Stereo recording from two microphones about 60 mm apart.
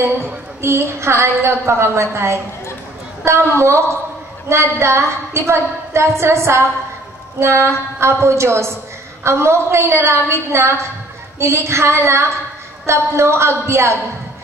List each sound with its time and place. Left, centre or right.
0.6 s a woman's voice: right